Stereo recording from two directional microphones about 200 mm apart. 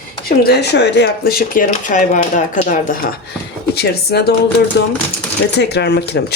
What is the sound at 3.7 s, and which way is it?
Speech, 55° left (ahead or behind).